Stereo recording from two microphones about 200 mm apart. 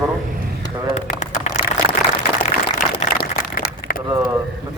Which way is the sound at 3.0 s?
45° left (ahead or behind).